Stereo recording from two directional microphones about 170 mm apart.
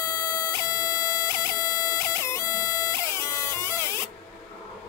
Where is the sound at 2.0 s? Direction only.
15° left (ahead or behind).